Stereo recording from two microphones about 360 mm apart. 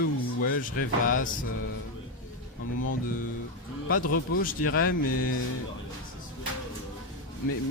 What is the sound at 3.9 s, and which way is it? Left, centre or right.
Speech, left.